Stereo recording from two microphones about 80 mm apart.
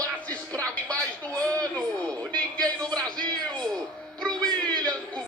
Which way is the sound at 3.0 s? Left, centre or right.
Centre.